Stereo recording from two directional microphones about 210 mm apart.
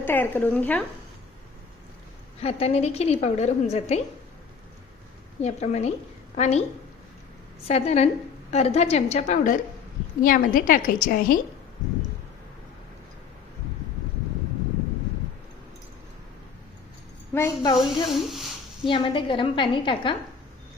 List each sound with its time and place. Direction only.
0.0 s speech: 10° left (ahead or behind)
2.4 s a woman's voice: 30° left (ahead or behind)
5.4 s a woman's voice: 30° left (ahead or behind)
7.7 s a woman's voice: 30° left (ahead or behind)
17.3 s speech: 10° left (ahead or behind)
17.7 s speech: centre (ahead or behind)
18.9 s a woman's voice: 25° left (ahead or behind)